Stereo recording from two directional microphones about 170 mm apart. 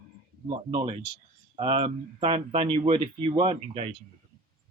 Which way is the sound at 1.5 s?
30° right (ahead or behind).